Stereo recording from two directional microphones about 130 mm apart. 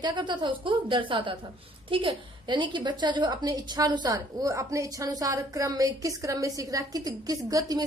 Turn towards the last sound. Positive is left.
turn(degrees=-30)  # may be behind; listen again after turning